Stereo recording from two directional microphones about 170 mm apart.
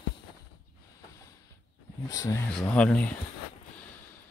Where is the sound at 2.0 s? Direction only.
20° left (ahead or behind).